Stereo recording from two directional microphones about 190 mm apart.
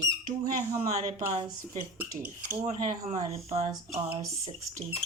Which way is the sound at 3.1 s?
35° right (ahead or behind).